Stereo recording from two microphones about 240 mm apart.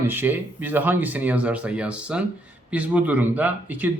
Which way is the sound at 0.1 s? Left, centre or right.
Centre.